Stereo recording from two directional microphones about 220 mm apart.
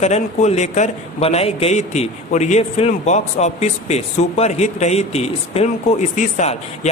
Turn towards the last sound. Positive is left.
turn(degrees=30)  # may be behind; listen again after turning